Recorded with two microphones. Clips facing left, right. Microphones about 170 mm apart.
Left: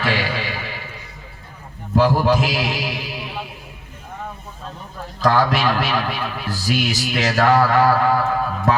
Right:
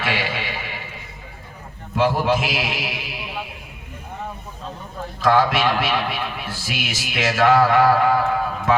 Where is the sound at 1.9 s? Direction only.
40° left (ahead or behind).